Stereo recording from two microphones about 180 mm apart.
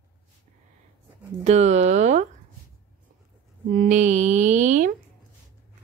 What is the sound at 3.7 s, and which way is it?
Speech, 45° right (ahead or behind).